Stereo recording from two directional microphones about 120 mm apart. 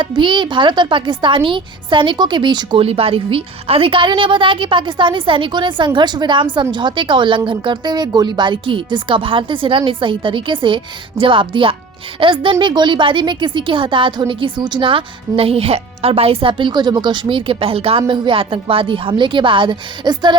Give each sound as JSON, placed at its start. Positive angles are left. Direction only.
{"t": 0.0, "sound": "speech", "side_deg": -40}
{"t": 2.8, "sound": "a woman's voice", "side_deg": -55}